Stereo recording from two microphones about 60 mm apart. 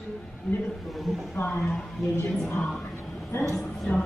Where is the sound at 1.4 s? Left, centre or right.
Left.